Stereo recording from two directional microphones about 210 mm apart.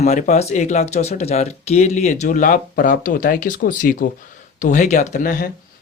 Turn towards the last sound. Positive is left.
turn(degrees=40)  # may be behind; listen again after turning